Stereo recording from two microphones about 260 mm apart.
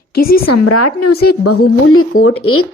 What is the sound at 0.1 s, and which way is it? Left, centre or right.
Speech, left.